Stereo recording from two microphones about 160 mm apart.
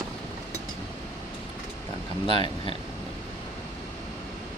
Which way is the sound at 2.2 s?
35° left (ahead or behind).